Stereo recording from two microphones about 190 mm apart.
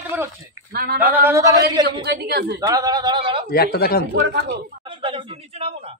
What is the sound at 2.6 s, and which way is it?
Speech, 20° right (ahead or behind).